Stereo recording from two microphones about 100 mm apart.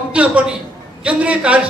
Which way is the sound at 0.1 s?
10° right (ahead or behind).